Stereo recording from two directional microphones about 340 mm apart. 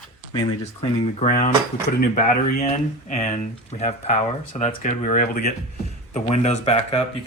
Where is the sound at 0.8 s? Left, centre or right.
Centre.